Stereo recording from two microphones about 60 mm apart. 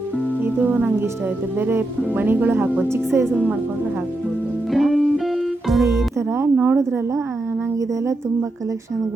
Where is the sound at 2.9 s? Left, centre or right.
Right.